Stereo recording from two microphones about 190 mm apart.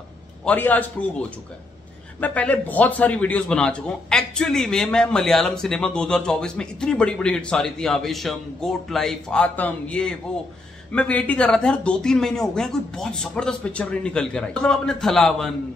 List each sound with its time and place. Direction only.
0.5 s a man's voice: 10° left (ahead or behind)